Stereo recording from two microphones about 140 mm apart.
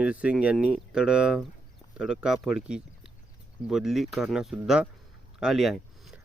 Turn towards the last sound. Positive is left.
turn(degrees=0)  # may be behind; listen again after turning